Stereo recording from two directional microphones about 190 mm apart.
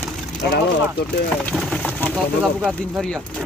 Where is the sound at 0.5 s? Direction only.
55° left (ahead or behind).